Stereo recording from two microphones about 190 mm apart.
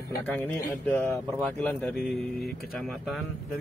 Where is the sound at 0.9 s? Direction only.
10° left (ahead or behind).